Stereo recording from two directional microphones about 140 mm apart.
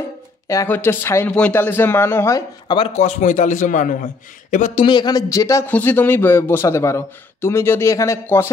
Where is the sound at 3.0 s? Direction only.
60° left (ahead or behind).